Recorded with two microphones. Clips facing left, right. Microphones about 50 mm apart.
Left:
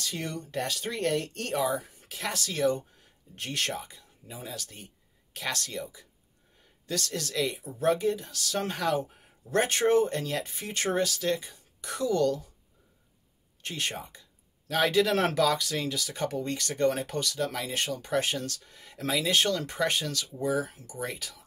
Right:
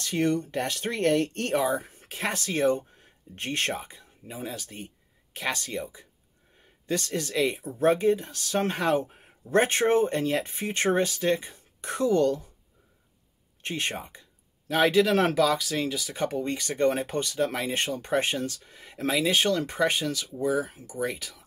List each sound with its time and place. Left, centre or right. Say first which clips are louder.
0.0 s speech: right 9 dB; right
7.5 s speech: right 3 dB; right
13.6 s speech: right 3 dB; right
14.9 s speech: right 3 dB; centre; by 18.5 s right
18.5 s speech: even; centre
21.0 s speech: right 5 dB; centre